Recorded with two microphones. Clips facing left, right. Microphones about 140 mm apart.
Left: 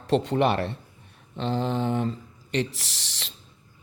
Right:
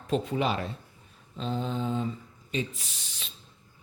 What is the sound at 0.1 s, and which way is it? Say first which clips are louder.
Speech: left 5 dB; 75° left (ahead or behind).